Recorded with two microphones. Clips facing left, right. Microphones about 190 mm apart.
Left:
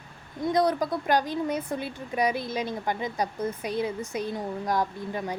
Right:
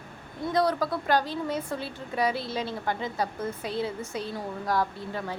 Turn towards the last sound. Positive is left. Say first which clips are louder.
# left 2 dB
turn(degrees=15)  # may be behind; listen again after turning